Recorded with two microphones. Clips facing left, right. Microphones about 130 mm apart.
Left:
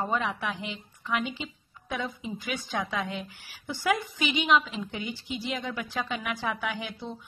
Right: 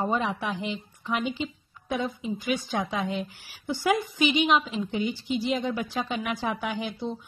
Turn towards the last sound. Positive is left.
turn(degrees=-20)  # may be behind; listen again after turning